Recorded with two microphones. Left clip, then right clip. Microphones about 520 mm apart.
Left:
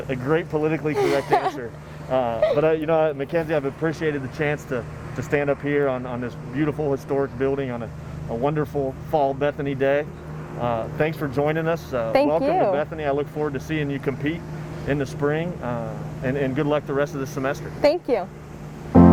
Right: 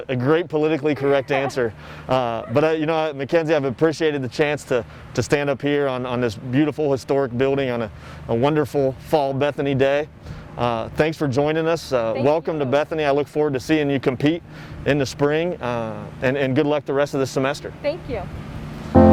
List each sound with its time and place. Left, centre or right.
0.1 s a man's voice: right
18.1 s speech: left